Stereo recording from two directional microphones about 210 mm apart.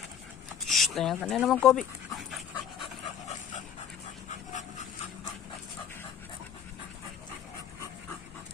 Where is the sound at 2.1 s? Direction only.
Centre (ahead or behind).